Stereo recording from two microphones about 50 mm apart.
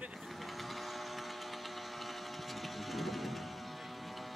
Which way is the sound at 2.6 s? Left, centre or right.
Centre.